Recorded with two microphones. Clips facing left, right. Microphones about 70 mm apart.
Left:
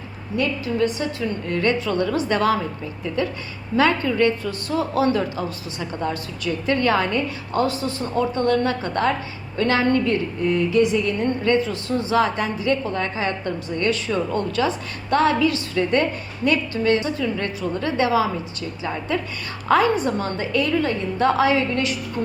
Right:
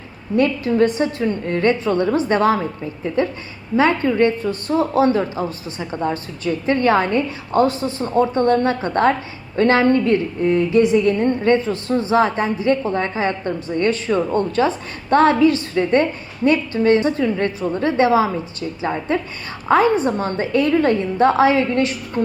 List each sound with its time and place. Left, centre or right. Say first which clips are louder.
0.3 s a woman's voice: right 6 dB; right